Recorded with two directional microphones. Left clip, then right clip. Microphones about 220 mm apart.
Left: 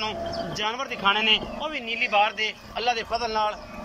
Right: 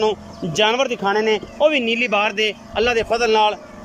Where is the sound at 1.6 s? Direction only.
50° right (ahead or behind).